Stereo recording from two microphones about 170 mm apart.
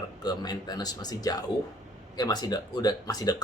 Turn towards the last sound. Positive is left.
turn(degrees=25)  # may be behind; listen again after turning